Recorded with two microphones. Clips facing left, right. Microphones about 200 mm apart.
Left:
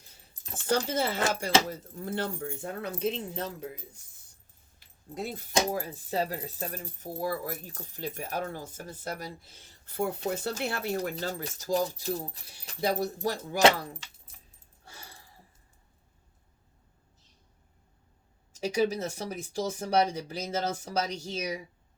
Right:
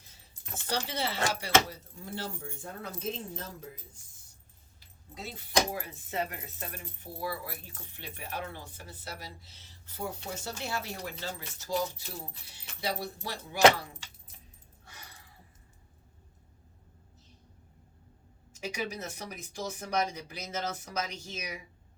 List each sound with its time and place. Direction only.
0.7 s speech: 50° left (ahead or behind); by 3.7 s 70° left (ahead or behind)
5.1 s speech: 50° left (ahead or behind)
5.5 s speech: 35° left (ahead or behind)
13.6 s speech: 30° left (ahead or behind)
14.8 s keys jangling: 40° left (ahead or behind)
18.6 s speech: 35° left (ahead or behind)
20.2 s speech: 40° left (ahead or behind)